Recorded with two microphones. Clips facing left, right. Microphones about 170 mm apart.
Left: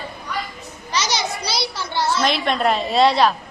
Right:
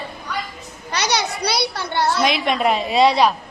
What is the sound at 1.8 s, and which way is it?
Speech, 60° right (ahead or behind).